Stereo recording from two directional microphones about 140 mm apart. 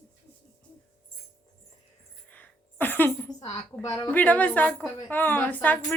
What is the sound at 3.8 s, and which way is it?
Speech, 25° left (ahead or behind).